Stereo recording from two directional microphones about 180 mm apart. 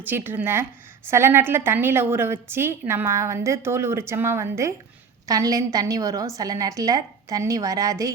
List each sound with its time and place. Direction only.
0.0 s a woman's voice: 10° right (ahead or behind)